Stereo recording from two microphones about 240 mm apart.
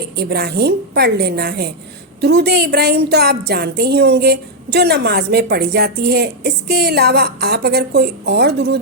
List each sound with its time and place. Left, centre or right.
0.2 s a woman's voice: right